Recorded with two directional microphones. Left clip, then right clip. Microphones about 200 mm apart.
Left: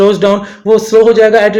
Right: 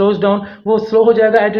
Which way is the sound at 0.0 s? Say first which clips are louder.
Left 5 dB; 45° left (ahead or behind).